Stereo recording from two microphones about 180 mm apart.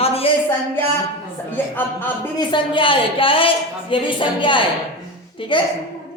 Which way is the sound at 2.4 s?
25° left (ahead or behind).